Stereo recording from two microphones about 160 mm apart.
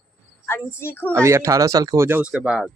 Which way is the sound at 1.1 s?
15° right (ahead or behind).